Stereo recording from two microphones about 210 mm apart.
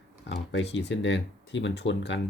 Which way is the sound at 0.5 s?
55° left (ahead or behind).